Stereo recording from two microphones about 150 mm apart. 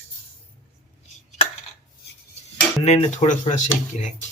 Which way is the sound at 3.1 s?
55° left (ahead or behind).